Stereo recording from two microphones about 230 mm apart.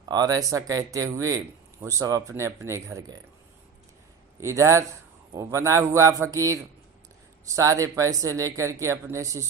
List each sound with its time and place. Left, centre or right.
0.1 s speech: centre
4.4 s speech: centre